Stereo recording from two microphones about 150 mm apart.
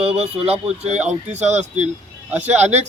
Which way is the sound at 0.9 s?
10° right (ahead or behind).